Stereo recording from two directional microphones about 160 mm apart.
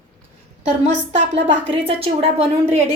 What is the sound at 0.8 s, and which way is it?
A woman's voice, 40° right (ahead or behind).